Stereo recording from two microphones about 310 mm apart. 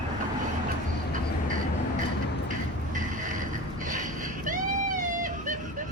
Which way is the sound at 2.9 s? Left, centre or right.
Right.